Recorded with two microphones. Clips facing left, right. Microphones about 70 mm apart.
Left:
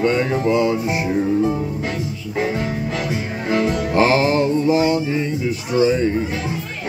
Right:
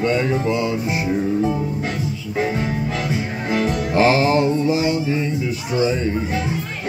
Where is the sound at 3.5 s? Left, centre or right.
Left.